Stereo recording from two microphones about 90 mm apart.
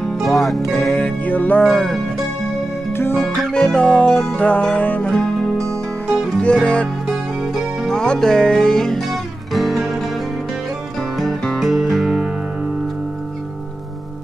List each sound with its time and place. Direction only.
0.0 s music: centre (ahead or behind)
0.9 s music: 15° left (ahead or behind)
1.6 s music: centre (ahead or behind)
2.9 s music: 25° left (ahead or behind)
3.3 s music: 10° left (ahead or behind)
6.4 s music: 10° left (ahead or behind)
11.0 s music: 5° left (ahead or behind)